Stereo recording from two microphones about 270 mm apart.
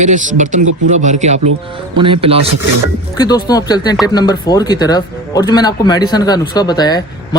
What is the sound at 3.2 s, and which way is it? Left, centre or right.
Speech, centre.